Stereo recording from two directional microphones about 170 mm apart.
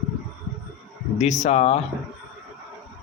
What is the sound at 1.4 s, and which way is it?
Speech, 40° left (ahead or behind).